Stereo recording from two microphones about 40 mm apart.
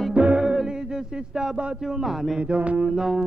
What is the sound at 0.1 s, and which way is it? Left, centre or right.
Music, right.